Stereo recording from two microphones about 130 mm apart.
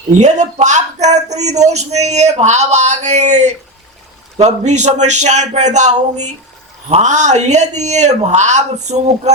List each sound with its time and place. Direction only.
0.2 s speech: 65° right (ahead or behind)